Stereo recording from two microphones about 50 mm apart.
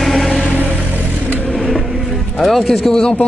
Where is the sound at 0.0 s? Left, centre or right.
Centre.